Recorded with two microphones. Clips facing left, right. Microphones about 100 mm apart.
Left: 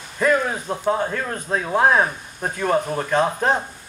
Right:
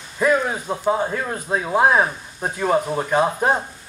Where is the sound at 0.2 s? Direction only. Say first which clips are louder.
Right 1 dB; 10° right (ahead or behind).